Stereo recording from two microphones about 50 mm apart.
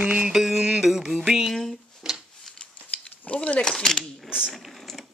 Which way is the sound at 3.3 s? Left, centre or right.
Left.